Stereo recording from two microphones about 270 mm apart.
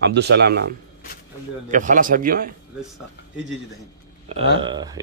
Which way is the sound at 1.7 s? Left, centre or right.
Right.